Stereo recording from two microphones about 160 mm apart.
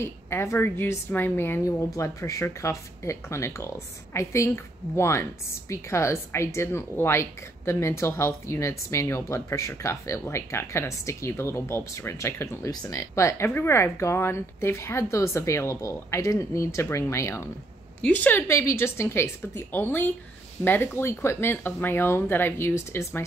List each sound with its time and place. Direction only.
0.0 s a woman's voice: 15° left (ahead or behind)